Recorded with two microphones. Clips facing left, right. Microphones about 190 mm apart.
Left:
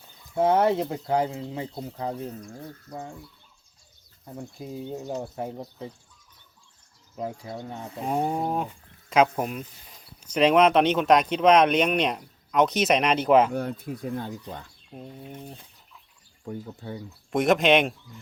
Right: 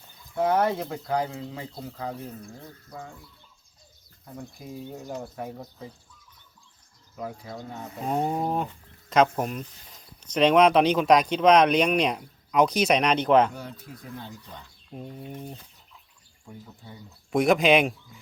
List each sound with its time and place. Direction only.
0.3 s speech: 25° left (ahead or behind)
4.4 s speech: 25° left (ahead or behind)
7.2 s speech: 25° left (ahead or behind)
8.0 s speech: 10° left (ahead or behind)
13.5 s speech: 55° left (ahead or behind)
14.9 s speech: centre (ahead or behind)
16.4 s speech: 65° left (ahead or behind)
17.3 s speech: centre (ahead or behind)